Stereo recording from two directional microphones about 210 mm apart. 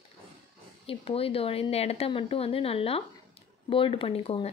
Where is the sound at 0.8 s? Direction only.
25° left (ahead or behind).